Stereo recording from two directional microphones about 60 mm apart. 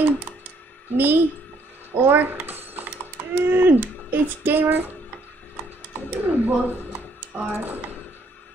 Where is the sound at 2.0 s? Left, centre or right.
Right.